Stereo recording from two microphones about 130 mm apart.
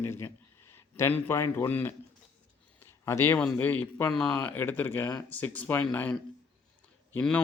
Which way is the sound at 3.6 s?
15° left (ahead or behind).